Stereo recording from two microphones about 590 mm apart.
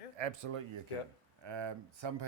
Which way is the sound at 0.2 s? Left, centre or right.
Right.